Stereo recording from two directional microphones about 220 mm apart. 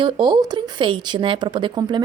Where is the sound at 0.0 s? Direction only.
20° right (ahead or behind).